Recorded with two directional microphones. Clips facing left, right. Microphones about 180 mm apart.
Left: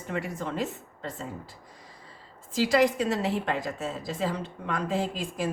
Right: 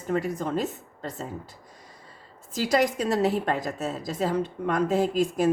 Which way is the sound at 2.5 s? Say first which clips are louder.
Left 1 dB; 40° right (ahead or behind).